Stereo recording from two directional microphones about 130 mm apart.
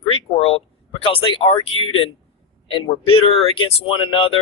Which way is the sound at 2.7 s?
45° left (ahead or behind).